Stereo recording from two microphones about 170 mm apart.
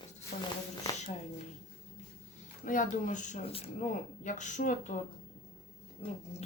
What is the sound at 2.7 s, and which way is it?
Speech, 50° left (ahead or behind).